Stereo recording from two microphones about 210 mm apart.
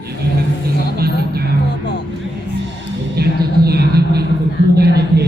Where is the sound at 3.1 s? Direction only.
50° right (ahead or behind).